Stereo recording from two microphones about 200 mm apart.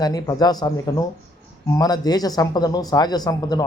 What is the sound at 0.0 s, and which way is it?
Speech, 20° left (ahead or behind).